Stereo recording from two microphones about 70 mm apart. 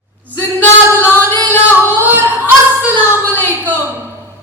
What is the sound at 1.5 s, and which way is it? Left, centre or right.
Singing, right.